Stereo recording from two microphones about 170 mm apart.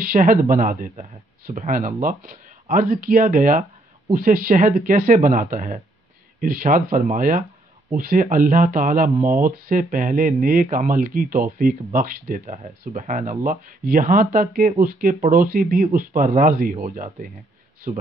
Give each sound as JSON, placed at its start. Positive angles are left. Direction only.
{"t": 0.1, "sound": "speech", "side_deg": -55}